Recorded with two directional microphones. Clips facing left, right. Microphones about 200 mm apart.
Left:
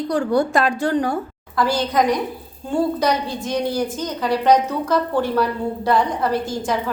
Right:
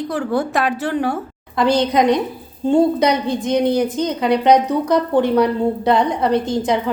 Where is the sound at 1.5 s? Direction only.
20° right (ahead or behind).